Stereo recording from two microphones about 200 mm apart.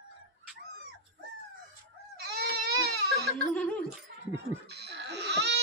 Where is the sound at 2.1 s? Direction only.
55° right (ahead or behind).